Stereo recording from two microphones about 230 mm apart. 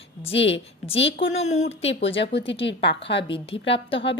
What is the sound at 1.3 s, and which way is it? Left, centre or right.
Speech, left.